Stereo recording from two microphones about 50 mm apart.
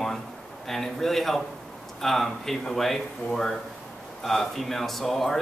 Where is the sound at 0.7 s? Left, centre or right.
Centre.